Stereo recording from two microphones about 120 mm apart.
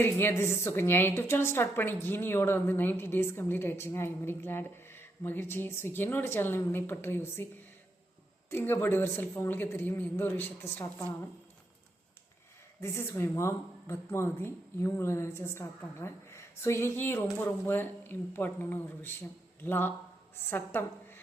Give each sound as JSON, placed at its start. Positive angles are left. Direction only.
{"t": 0.0, "sound": "a woman's voice", "side_deg": 20}
{"t": 8.4, "sound": "speech", "side_deg": 20}
{"t": 12.8, "sound": "a woman's voice", "side_deg": 20}